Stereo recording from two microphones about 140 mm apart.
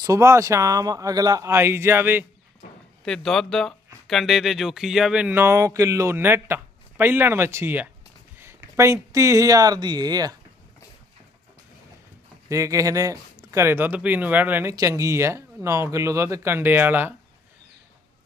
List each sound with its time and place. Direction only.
0.0 s speech: 25° right (ahead or behind)
3.0 s speech: 5° left (ahead or behind); by 10.3 s 30° right (ahead or behind)
12.5 s speech: 20° right (ahead or behind)